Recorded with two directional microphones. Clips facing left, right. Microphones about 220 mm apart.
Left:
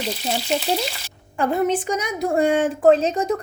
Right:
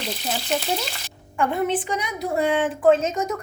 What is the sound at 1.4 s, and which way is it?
A woman's voice, 40° left (ahead or behind).